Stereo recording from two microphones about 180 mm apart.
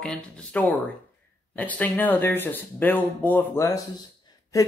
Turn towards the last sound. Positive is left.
turn(degrees=20)  # may be behind; listen again after turning